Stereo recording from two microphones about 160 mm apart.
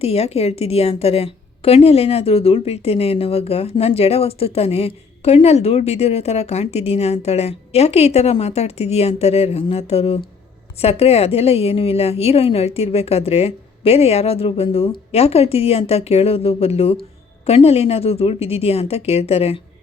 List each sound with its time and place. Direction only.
0.0 s a woman's voice: 40° left (ahead or behind)